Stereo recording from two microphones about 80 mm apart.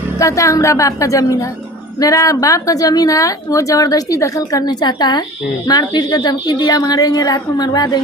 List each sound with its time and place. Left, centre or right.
0.2 s a woman's voice: left